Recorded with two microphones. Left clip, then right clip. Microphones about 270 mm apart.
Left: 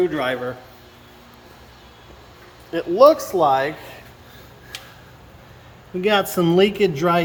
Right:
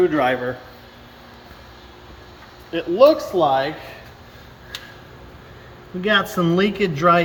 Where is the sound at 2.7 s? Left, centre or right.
Centre.